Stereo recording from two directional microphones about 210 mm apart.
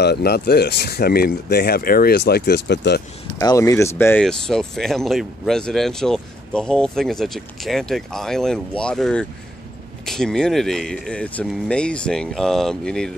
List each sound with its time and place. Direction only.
0.0 s speech: 50° left (ahead or behind)
3.3 s speech: 15° left (ahead or behind)